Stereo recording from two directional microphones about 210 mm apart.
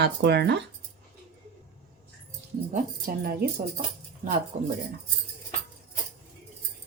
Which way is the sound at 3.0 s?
40° right (ahead or behind).